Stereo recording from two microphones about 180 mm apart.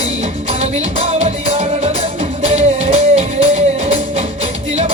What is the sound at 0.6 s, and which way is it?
Music, 35° right (ahead or behind).